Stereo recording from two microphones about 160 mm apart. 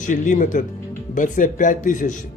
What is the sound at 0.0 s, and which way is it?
A man's voice, 50° left (ahead or behind).